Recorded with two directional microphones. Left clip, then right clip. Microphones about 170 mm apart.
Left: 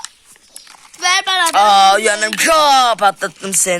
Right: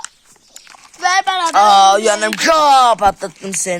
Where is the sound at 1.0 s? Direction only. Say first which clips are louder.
Even; 70° right (ahead or behind).